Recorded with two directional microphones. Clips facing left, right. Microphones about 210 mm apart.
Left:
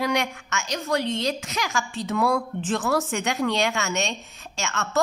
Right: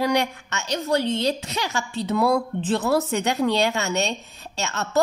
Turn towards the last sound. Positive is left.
turn(degrees=-40)  # may be behind; listen again after turning